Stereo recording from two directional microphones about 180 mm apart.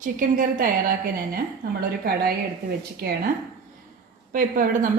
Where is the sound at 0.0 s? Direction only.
45° right (ahead or behind).